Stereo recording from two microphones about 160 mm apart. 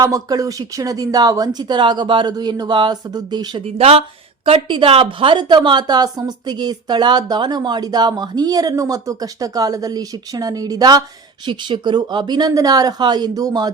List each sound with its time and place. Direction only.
0.0 s a woman's voice: 20° right (ahead or behind)
3.8 s a woman's voice: 40° right (ahead or behind); by 13.7 s 25° right (ahead or behind)